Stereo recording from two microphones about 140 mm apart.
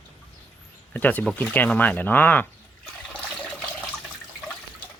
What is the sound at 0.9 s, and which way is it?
Speech, 10° left (ahead or behind).